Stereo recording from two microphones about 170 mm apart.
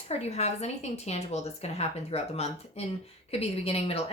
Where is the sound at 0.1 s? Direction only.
40° left (ahead or behind).